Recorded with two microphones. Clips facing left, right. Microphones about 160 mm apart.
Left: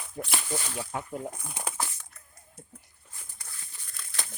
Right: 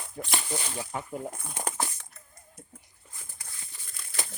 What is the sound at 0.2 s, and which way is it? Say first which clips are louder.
Speech: even; 5° left (ahead or behind).